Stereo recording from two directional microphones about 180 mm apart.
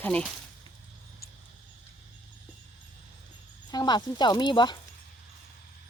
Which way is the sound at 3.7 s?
20° left (ahead or behind).